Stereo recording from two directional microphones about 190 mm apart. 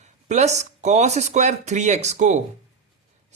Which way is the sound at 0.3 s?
35° right (ahead or behind).